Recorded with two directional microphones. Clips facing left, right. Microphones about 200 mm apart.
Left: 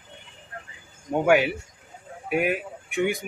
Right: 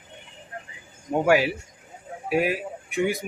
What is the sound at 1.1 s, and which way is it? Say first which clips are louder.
A man's voice: even; centre (ahead or behind).